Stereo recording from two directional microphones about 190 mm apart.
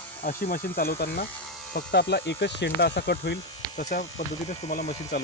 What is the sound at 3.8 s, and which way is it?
Speech, 40° left (ahead or behind).